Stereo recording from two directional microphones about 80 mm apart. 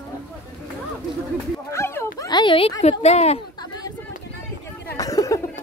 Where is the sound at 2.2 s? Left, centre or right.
Left.